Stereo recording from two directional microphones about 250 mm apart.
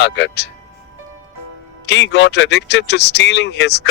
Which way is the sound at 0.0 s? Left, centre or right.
Left.